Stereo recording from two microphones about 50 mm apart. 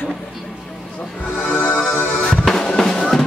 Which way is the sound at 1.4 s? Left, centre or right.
Left.